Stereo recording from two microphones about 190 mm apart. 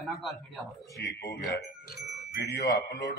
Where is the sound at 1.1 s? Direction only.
55° left (ahead or behind).